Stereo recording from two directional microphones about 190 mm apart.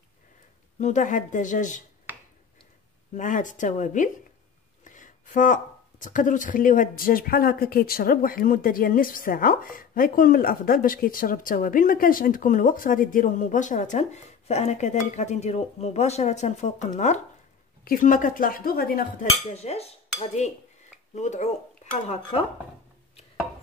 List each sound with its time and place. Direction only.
0.7 s speech: 40° left (ahead or behind)
2.1 s finger snapping: 10° right (ahead or behind)
3.2 s speech: 40° left (ahead or behind)
19.5 s speech: 35° left (ahead or behind)